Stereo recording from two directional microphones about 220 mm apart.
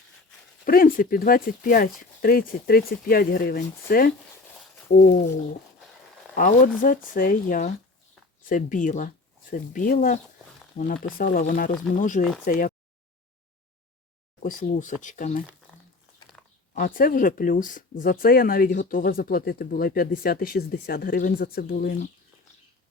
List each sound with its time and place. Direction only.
0.6 s speech: 40° left (ahead or behind)
6.3 s speech: 35° left (ahead or behind)
14.4 s speech: 40° left (ahead or behind)
16.7 s speech: 40° left (ahead or behind)